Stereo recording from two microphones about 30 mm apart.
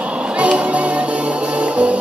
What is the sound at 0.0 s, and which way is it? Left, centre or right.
Music, right.